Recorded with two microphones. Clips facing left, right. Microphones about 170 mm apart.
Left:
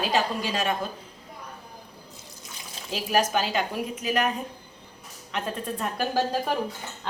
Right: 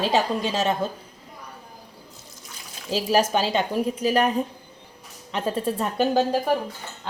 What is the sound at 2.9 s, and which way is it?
A woman's voice, 30° right (ahead or behind).